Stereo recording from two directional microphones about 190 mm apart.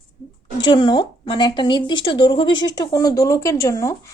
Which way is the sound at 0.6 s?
25° left (ahead or behind).